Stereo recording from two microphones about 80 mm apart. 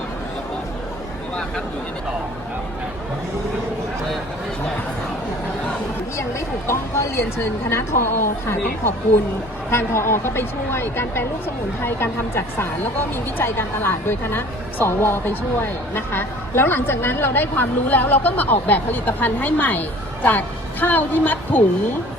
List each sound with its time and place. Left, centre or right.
6.7 s a woman's voice: left